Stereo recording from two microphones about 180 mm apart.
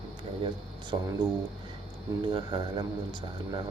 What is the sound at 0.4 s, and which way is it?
Speech, 25° right (ahead or behind).